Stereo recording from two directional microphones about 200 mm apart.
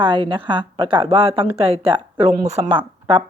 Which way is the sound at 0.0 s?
25° right (ahead or behind).